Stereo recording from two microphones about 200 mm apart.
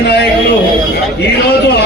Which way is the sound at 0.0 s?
55° left (ahead or behind).